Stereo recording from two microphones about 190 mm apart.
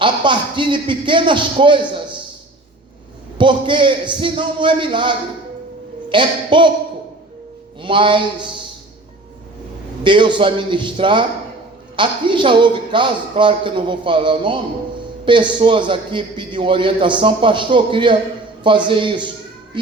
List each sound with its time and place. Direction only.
0.0 s speech: 25° right (ahead or behind)
3.3 s speech: 25° right (ahead or behind)
7.8 s speech: 25° right (ahead or behind)
10.0 s a man's voice: 25° right (ahead or behind)